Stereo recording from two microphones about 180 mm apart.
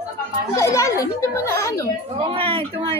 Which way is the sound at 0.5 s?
15° left (ahead or behind).